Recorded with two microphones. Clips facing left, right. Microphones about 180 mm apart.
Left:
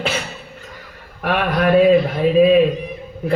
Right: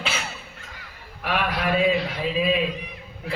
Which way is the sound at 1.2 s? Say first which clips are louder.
Left 7 dB; 55° left (ahead or behind).